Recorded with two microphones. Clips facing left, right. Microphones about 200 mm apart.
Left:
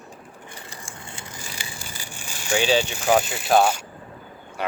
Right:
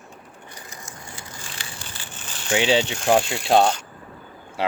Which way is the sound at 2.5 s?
25° right (ahead or behind).